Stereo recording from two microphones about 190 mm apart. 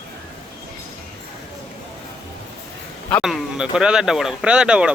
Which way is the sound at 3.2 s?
Centre (ahead or behind).